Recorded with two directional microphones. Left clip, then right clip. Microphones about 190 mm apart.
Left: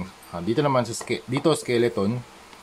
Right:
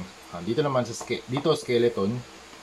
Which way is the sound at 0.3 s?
40° left (ahead or behind).